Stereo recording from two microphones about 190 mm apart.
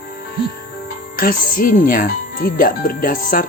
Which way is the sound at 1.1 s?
45° left (ahead or behind).